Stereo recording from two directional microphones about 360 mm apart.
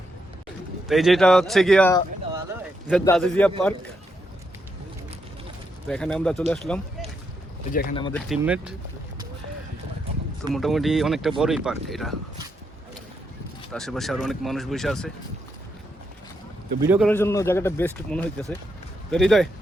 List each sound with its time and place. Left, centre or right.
0.9 s speech: centre
5.9 s speech: centre
7.7 s a man's voice: left
8.3 s speech: centre
10.5 s speech: centre
13.7 s speech: centre
16.8 s speech: centre
17.1 s a man's voice: centre